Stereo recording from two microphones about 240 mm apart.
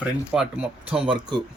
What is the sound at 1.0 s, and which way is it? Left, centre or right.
Speech, centre.